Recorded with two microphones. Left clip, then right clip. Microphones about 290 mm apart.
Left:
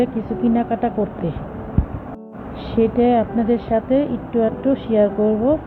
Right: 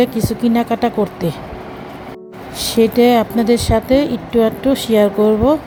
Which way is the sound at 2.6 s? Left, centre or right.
Right.